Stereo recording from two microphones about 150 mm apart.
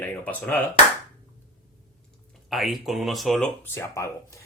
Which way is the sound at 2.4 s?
Centre (ahead or behind).